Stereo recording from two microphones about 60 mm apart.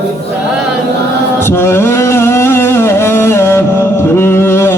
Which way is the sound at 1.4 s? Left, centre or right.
Left.